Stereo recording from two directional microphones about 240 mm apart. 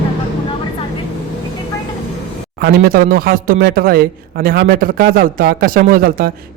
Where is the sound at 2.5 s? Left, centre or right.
Right.